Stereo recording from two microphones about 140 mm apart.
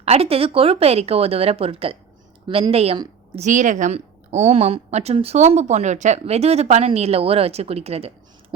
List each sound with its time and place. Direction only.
0.0 s a woman's voice: 45° right (ahead or behind)
3.3 s a woman's voice: 60° right (ahead or behind)